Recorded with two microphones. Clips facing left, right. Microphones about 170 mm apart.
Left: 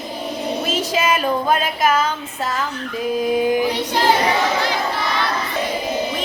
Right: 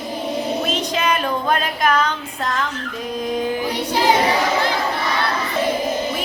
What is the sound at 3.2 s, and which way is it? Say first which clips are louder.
Singing: left 4 dB; 5° left (ahead or behind).